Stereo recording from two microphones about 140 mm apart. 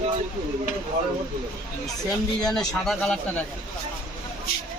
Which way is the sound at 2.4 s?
5° left (ahead or behind).